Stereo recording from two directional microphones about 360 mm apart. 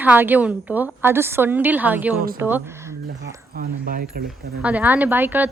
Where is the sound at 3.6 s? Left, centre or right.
Right.